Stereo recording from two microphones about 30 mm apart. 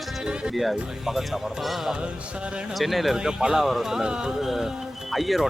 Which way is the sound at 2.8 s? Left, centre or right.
Centre.